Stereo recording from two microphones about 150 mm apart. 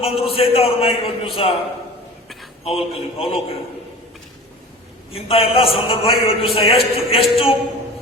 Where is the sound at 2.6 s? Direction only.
40° left (ahead or behind).